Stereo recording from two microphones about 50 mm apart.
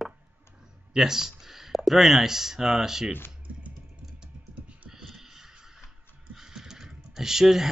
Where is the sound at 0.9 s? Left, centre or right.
Centre.